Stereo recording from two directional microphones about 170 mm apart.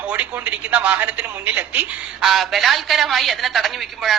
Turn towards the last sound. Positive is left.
turn(degrees=0)  # may be behind; listen again after turning